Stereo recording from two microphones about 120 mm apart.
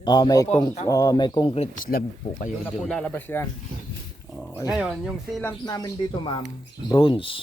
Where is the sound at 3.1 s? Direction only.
20° left (ahead or behind).